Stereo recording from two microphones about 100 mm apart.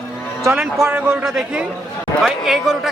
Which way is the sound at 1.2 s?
5° right (ahead or behind).